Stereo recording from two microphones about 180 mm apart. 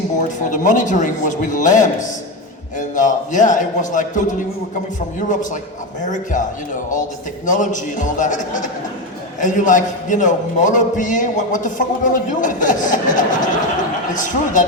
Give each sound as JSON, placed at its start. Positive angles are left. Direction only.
{"t": 0.2, "sound": "a man's voice", "side_deg": 45}
{"t": 6.0, "sound": "a man's voice", "side_deg": 45}
{"t": 7.4, "sound": "a man's voice", "side_deg": 45}